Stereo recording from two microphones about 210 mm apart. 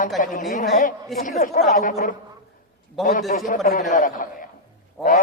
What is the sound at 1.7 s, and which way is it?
Speech, 35° left (ahead or behind).